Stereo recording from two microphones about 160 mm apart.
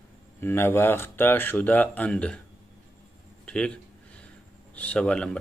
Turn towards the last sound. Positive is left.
turn(degrees=5)  # may be behind; listen again after turning